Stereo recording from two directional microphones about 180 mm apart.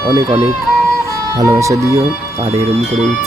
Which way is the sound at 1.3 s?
15° right (ahead or behind).